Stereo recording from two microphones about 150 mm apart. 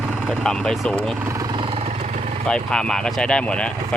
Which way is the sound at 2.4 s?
5° left (ahead or behind).